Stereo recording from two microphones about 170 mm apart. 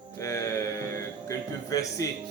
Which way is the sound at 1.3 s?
20° left (ahead or behind).